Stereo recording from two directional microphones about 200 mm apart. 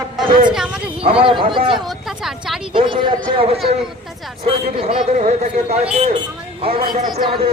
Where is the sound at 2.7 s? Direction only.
25° right (ahead or behind).